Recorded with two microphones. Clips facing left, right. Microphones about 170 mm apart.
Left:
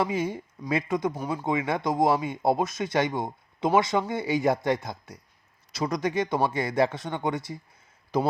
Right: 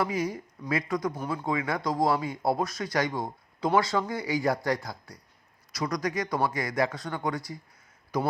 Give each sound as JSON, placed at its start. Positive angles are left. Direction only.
{"t": 0.0, "sound": "speech", "side_deg": 25}